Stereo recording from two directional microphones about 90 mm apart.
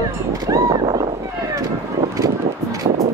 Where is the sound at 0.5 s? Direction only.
45° right (ahead or behind).